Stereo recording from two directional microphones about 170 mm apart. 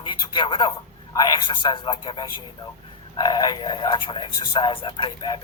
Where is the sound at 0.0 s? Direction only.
30° left (ahead or behind).